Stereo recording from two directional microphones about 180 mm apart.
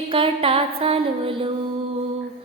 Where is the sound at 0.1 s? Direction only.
30° right (ahead or behind).